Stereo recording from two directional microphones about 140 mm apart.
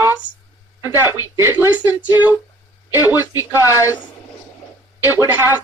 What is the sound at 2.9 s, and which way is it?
Speech, 15° right (ahead or behind).